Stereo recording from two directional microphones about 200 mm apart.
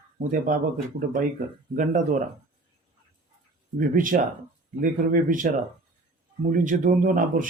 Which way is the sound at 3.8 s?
40° right (ahead or behind).